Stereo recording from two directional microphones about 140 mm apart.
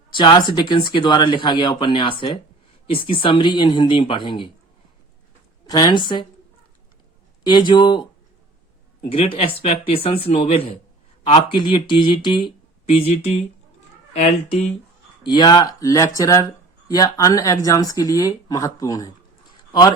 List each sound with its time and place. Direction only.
0.1 s speech: 35° left (ahead or behind)
5.6 s speech: 30° left (ahead or behind)
7.4 s speech: 30° left (ahead or behind)
9.0 s speech: 45° left (ahead or behind)
15.2 s speech: 30° left (ahead or behind)